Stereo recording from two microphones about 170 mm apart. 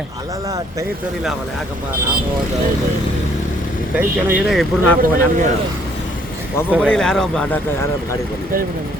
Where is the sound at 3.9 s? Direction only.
10° right (ahead or behind).